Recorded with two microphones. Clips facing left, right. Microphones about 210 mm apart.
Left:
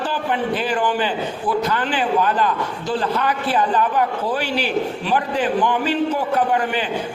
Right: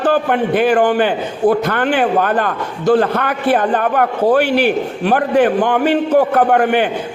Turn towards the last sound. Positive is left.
turn(degrees=-60)  # may be behind; listen again after turning